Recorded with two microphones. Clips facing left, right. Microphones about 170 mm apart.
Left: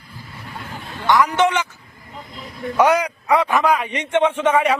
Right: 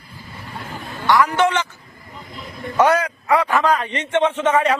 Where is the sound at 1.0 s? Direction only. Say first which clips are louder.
Even; 20° left (ahead or behind).